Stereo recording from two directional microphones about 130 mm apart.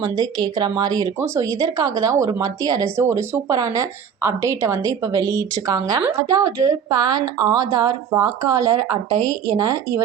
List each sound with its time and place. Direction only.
0.0 s speech: 30° right (ahead or behind)